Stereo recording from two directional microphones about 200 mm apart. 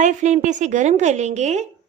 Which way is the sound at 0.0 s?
35° right (ahead or behind).